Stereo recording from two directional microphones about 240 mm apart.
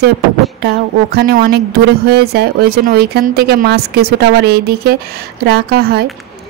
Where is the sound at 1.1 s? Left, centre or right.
Right.